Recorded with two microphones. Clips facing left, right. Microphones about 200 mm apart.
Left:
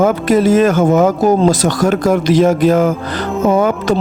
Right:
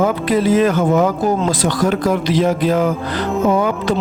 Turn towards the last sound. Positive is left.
turn(degrees=45)  # may be behind; listen again after turning